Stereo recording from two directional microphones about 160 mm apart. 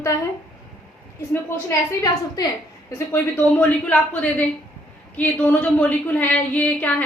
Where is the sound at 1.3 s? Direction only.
15° left (ahead or behind).